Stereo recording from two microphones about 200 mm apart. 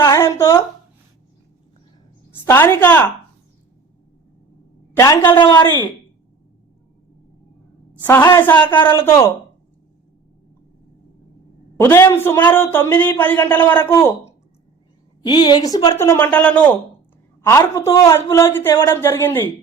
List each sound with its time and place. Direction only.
0.0 s a sound: 15° left (ahead or behind)
2.4 s speech: 10° left (ahead or behind)
4.9 s a woman's voice: 15° left (ahead or behind)
5.5 s speech: 10° left (ahead or behind)
8.0 s speech: 10° left (ahead or behind)
11.8 s speech: 10° left (ahead or behind)